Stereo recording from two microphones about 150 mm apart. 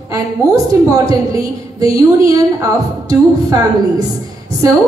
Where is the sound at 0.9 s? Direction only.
25° right (ahead or behind).